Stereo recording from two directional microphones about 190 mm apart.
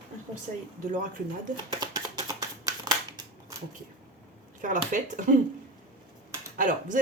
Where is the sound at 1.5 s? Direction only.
20° right (ahead or behind).